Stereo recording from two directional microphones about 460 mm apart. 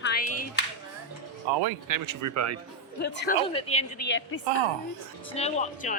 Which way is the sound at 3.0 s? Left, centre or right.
Left.